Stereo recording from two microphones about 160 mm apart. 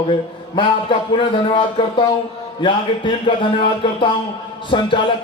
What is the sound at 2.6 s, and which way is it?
A man's voice, 30° left (ahead or behind).